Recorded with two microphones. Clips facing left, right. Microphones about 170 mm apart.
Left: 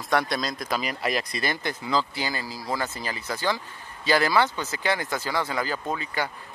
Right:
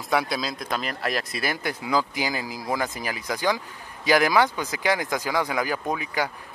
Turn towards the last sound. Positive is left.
turn(degrees=-10)  # may be behind; listen again after turning